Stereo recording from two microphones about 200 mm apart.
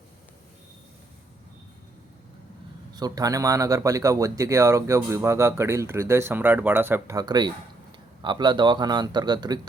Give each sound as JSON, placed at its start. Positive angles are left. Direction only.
{"t": 2.9, "sound": "a man's voice", "side_deg": -20}